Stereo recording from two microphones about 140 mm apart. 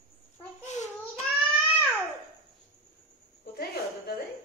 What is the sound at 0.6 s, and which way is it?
Babbling, 55° left (ahead or behind).